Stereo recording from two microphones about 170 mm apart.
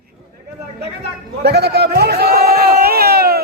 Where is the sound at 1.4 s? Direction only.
70° right (ahead or behind).